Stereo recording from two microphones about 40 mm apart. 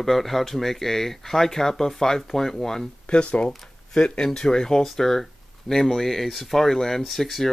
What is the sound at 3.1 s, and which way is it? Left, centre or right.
Speech, left.